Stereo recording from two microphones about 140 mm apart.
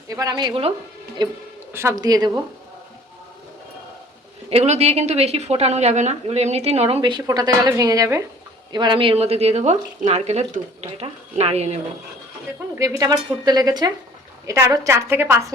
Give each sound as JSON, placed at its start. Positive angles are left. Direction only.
{"t": 0.1, "sound": "a woman's voice", "side_deg": -25}
{"t": 1.7, "sound": "a woman's voice", "side_deg": -20}
{"t": 4.4, "sound": "a woman's voice", "side_deg": -50}
{"t": 7.3, "sound": "a woman's voice", "side_deg": -25}
{"t": 8.7, "sound": "a woman's voice", "side_deg": -35}
{"t": 12.7, "sound": "a woman's voice", "side_deg": -25}